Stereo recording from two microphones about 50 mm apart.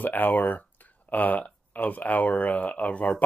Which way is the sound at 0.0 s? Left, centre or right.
Left.